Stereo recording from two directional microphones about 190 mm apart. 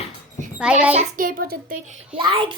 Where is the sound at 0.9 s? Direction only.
40° right (ahead or behind).